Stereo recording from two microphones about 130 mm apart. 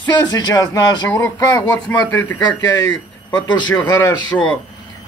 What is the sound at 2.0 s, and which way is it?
Speech, 20° left (ahead or behind).